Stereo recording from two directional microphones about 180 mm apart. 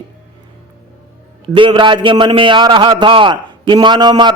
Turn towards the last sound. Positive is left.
turn(degrees=-25)  # may be behind; listen again after turning